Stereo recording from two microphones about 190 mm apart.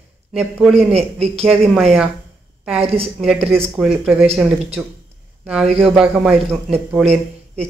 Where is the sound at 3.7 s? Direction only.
Centre (ahead or behind).